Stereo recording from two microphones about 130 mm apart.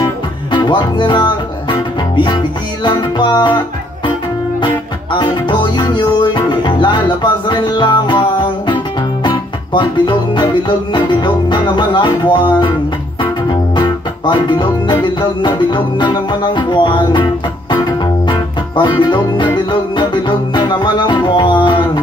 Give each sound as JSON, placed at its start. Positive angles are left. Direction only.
{"t": 0.0, "sound": "music", "side_deg": 35}